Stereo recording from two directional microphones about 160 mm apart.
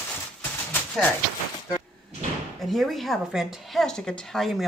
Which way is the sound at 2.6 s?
Centre (ahead or behind).